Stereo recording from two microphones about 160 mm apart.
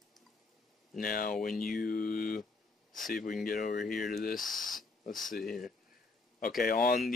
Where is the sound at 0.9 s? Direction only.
60° left (ahead or behind).